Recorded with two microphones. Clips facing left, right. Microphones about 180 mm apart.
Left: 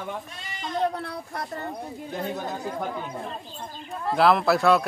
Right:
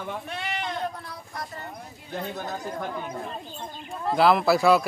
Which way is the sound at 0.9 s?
65° left (ahead or behind).